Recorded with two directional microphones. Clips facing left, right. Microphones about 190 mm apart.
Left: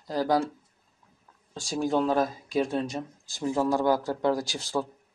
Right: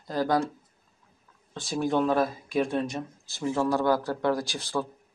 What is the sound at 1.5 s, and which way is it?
Speech, 40° left (ahead or behind).